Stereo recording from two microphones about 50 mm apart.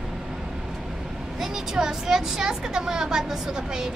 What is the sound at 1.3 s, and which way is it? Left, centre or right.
A woman's voice, centre.